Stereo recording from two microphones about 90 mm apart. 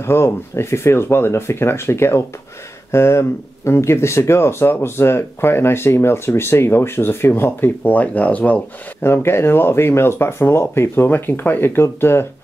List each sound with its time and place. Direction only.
0.0 s speech: 30° left (ahead or behind)
9.0 s speech: 25° left (ahead or behind)